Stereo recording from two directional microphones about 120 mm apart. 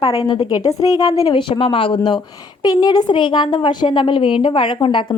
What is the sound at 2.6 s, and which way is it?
A woman's voice, 35° left (ahead or behind).